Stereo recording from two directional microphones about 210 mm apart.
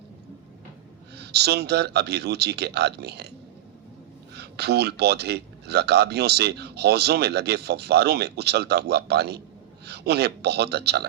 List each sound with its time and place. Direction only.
1.1 s a man's voice: 50° right (ahead or behind)
4.4 s a man's voice: 50° right (ahead or behind)